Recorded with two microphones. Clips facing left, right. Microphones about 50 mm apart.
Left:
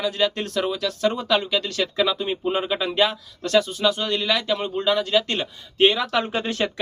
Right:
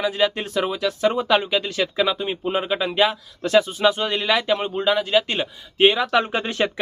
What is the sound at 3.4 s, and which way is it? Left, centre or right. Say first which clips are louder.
Speech: right 2 dB; right.